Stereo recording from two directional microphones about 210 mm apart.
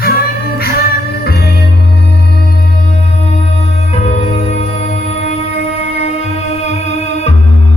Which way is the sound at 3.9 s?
30° left (ahead or behind).